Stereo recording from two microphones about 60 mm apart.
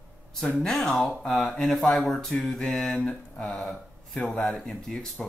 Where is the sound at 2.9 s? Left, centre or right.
Centre.